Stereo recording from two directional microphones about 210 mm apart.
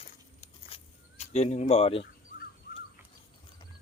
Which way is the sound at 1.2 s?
30° left (ahead or behind).